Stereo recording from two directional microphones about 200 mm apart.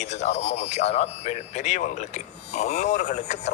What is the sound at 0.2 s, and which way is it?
Speech, 35° left (ahead or behind).